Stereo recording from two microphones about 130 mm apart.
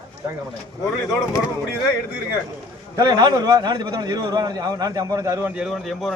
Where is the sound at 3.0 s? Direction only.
30° right (ahead or behind).